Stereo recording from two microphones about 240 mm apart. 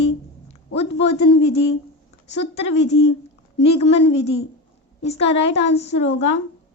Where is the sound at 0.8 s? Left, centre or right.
Left.